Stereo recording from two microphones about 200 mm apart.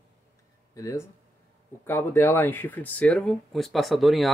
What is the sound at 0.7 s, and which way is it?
Speech, 15° left (ahead or behind).